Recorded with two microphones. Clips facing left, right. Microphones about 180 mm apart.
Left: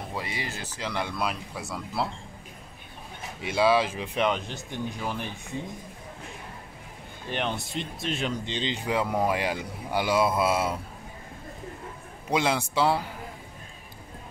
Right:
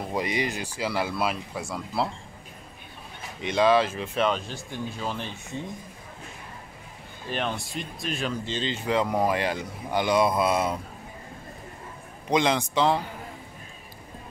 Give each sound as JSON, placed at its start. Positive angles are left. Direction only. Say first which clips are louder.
{"t": 0.1, "sound": "speech", "louder": "right 9 dB", "side_deg": -20}
{"t": 3.3, "sound": "speech", "louder": "right 2 dB", "side_deg": 5}
{"t": 7.2, "sound": "speech", "louder": "even", "side_deg": 20}
{"t": 12.3, "sound": "speech", "louder": "right 2 dB", "side_deg": 5}